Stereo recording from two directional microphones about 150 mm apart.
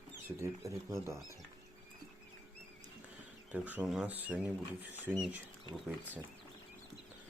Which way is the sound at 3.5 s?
10° right (ahead or behind).